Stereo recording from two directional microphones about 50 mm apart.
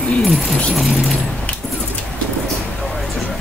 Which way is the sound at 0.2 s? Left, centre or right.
Centre.